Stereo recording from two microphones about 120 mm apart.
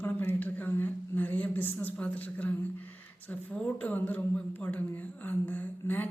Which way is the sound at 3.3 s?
10° left (ahead or behind).